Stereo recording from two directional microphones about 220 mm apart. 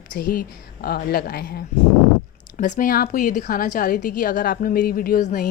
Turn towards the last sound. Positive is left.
turn(degrees=35)  # may be behind; listen again after turning